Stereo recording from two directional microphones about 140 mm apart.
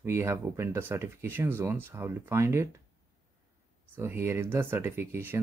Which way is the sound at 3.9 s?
15° right (ahead or behind).